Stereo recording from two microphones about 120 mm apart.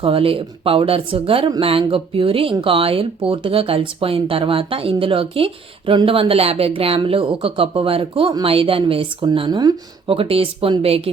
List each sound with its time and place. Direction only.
0.0 s speech: 50° right (ahead or behind)